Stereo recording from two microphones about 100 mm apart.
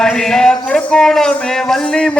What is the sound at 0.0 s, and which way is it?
Speech, 5° left (ahead or behind).